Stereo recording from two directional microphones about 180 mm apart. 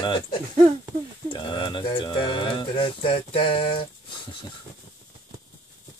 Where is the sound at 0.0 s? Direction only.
25° left (ahead or behind).